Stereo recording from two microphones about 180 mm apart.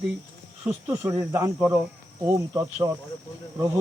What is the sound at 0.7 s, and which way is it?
Speech, 15° right (ahead or behind).